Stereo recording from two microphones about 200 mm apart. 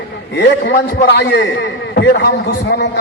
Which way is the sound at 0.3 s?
60° left (ahead or behind).